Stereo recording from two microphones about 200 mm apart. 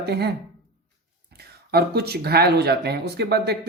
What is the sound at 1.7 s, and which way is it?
Speech, 50° right (ahead or behind).